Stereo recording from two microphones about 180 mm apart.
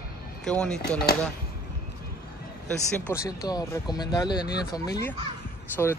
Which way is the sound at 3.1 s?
15° left (ahead or behind).